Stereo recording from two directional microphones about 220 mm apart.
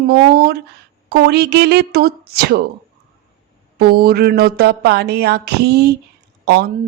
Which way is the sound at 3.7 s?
45° right (ahead or behind).